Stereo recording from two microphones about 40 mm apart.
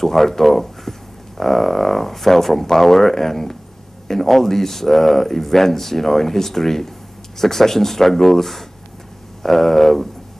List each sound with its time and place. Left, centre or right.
0.0 s speech: centre